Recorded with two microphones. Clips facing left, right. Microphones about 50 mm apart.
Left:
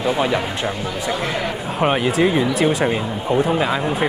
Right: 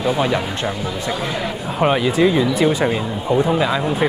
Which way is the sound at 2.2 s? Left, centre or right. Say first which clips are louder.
Right 2 dB; left.